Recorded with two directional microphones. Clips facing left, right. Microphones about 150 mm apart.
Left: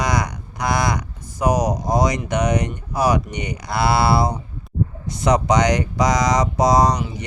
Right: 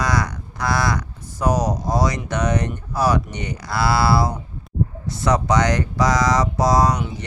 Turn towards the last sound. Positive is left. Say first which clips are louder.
# left 1 dB
turn(degrees=20)  # may be behind; listen again after turning